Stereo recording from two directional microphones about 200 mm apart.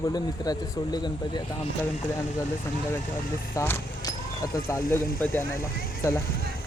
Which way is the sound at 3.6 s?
15° left (ahead or behind).